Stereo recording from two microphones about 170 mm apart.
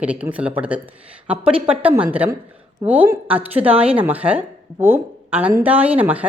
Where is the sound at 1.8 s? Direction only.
10° right (ahead or behind).